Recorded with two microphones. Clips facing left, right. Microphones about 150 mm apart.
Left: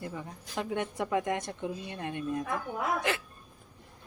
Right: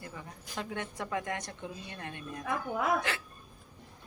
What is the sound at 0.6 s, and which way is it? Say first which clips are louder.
A woman's voice: left 6 dB; 20° left (ahead or behind).